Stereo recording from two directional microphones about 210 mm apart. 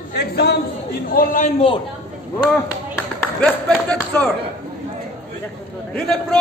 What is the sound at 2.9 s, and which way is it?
Speech, 5° left (ahead or behind).